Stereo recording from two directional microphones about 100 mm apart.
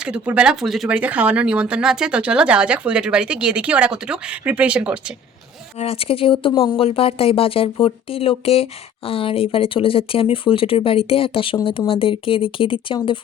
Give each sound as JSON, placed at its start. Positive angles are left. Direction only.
{"t": 0.0, "sound": "speech", "side_deg": -10}
{"t": 0.9, "sound": "speech", "side_deg": -15}
{"t": 5.8, "sound": "speech", "side_deg": 70}